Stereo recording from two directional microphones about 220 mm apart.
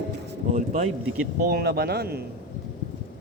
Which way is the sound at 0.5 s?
30° right (ahead or behind).